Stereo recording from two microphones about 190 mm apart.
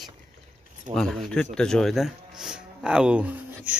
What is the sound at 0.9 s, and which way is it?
Speech, 45° right (ahead or behind).